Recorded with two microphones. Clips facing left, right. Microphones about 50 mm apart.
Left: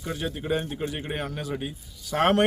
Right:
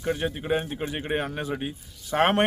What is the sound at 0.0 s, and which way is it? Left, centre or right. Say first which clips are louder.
A man's voice: right 3 dB; right.